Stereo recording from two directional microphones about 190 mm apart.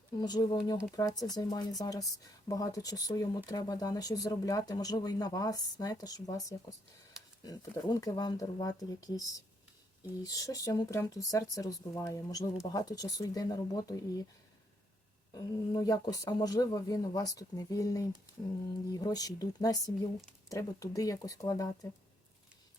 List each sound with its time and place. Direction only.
0.2 s speech: 20° left (ahead or behind)
10.2 s speech: 20° left (ahead or behind)
15.4 s speech: 20° left (ahead or behind)